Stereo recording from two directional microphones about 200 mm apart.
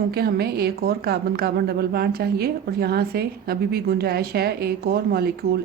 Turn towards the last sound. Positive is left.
turn(degrees=-50)  # may be behind; listen again after turning